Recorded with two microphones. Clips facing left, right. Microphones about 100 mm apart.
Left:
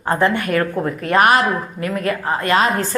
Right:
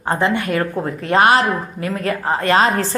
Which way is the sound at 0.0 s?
20° right (ahead or behind).